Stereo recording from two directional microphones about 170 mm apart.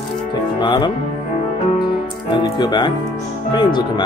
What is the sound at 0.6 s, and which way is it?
Music, 30° left (ahead or behind).